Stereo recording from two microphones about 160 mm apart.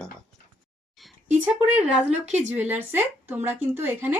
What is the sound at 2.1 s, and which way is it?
Speech, 45° right (ahead or behind).